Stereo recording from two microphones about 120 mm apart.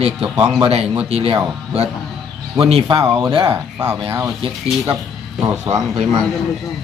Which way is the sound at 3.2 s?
35° right (ahead or behind).